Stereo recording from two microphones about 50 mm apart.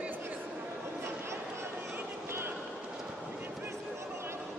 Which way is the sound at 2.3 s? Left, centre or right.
Right.